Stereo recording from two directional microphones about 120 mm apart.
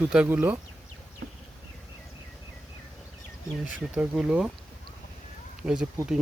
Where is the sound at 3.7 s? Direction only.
10° right (ahead or behind).